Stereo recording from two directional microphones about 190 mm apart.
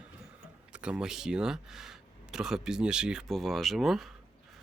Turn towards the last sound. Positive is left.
turn(degrees=0)  # may be behind; listen again after turning